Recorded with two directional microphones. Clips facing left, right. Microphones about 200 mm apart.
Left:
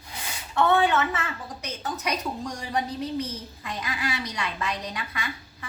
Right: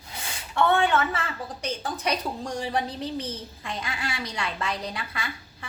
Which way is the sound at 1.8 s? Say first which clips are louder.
Even; 30° right (ahead or behind).